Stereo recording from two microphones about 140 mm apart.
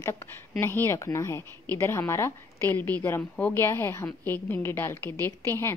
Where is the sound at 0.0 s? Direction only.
20° left (ahead or behind).